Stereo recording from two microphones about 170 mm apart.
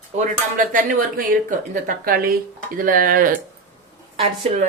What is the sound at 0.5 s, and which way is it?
Speech, 50° right (ahead or behind).